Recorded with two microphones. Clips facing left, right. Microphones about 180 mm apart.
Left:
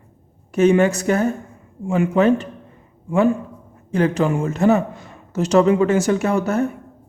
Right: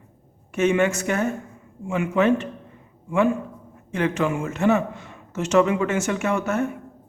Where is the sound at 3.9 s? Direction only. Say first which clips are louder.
Left 5 dB; 35° left (ahead or behind).